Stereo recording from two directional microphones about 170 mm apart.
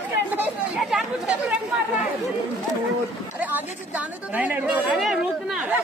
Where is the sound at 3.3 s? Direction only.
10° right (ahead or behind).